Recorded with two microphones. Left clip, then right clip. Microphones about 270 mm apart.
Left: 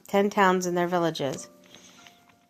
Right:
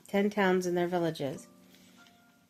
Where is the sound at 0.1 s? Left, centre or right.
Centre.